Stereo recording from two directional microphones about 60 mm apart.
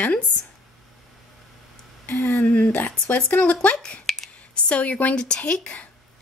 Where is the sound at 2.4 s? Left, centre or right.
Left.